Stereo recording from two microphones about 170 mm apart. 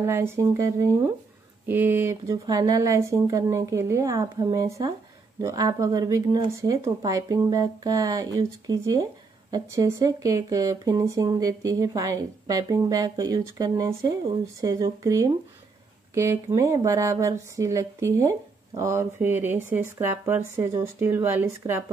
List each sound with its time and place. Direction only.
0.0 s speech: 15° right (ahead or behind)